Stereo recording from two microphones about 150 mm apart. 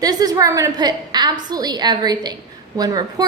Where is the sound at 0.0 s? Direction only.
25° right (ahead or behind).